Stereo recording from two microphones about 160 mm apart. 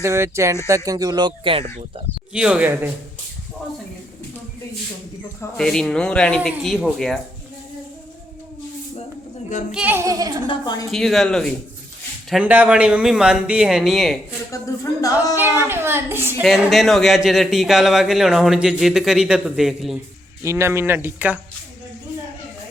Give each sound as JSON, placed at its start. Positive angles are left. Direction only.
{"t": 0.0, "sound": "speech", "side_deg": -20}
{"t": 2.3, "sound": "speech", "side_deg": -10}
{"t": 5.5, "sound": "a man's voice", "side_deg": 5}
{"t": 9.7, "sound": "speech", "side_deg": -10}
{"t": 10.4, "sound": "a woman's voice", "side_deg": 30}
{"t": 10.9, "sound": "a man's voice", "side_deg": 0}
{"t": 12.3, "sound": "a man's voice", "side_deg": -10}
{"t": 15.0, "sound": "a woman's voice", "side_deg": 20}
{"t": 15.6, "sound": "speech", "side_deg": -15}
{"t": 16.4, "sound": "a man's voice", "side_deg": 0}
{"t": 20.4, "sound": "speech", "side_deg": -20}